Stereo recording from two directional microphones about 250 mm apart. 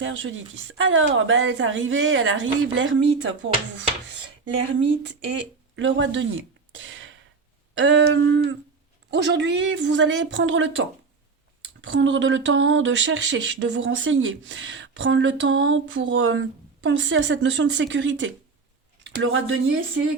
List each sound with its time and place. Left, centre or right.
0.0 s speech: right
5.7 s speech: right
11.8 s speech: right